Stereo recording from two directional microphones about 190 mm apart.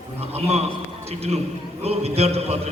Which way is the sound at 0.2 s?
35° right (ahead or behind).